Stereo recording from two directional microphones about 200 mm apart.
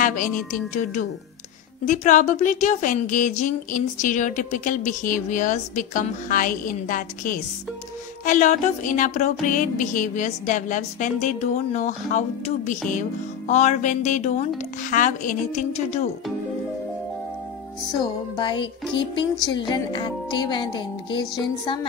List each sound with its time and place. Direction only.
1.9 s a woman's voice: 40° left (ahead or behind)
18.3 s music: 25° left (ahead or behind)